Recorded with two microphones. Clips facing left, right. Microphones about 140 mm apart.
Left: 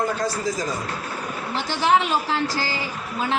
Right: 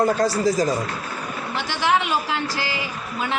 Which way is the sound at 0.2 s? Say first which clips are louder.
Right 6 dB; 40° right (ahead or behind).